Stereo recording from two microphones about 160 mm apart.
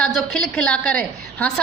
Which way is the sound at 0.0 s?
Centre (ahead or behind).